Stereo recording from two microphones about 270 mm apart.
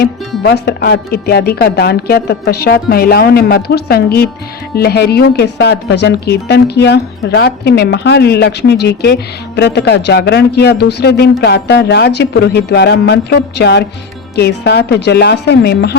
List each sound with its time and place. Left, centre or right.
0.0 s speech: left